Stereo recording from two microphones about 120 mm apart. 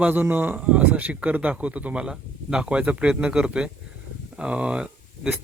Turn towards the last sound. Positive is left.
turn(degrees=-10)  # may be behind; listen again after turning